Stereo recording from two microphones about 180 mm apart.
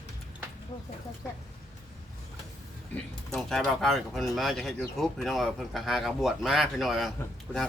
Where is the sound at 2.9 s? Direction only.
Centre (ahead or behind).